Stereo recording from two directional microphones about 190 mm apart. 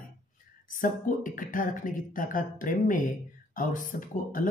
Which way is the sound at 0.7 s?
45° left (ahead or behind).